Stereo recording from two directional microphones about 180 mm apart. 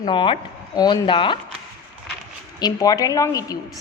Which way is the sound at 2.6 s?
20° left (ahead or behind).